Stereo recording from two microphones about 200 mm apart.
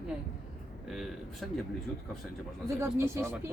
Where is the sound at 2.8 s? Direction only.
10° right (ahead or behind).